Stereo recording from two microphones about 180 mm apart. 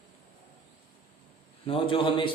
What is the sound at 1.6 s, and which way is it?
Speech, 30° left (ahead or behind).